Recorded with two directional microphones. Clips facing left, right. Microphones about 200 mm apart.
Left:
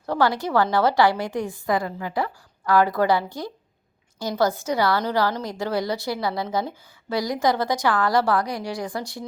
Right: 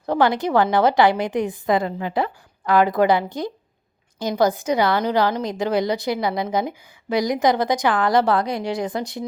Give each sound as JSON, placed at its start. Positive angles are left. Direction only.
{"t": 0.0, "sound": "a woman's voice", "side_deg": -20}